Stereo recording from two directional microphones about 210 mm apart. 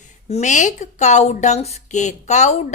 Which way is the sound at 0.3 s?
35° left (ahead or behind).